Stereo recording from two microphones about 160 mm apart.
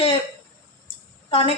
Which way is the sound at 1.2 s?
35° left (ahead or behind).